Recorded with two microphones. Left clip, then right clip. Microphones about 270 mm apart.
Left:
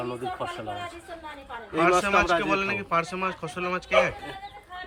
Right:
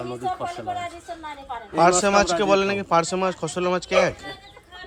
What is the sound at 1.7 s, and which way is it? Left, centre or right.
A man's voice, centre.